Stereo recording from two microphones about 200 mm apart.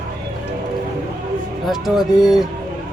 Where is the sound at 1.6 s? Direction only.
Centre (ahead or behind).